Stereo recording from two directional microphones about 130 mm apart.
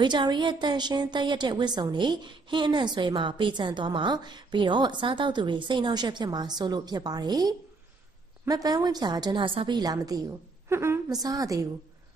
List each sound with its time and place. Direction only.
0.0 s a woman's voice: 35° right (ahead or behind)